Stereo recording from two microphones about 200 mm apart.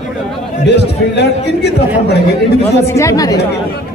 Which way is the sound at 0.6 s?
55° left (ahead or behind).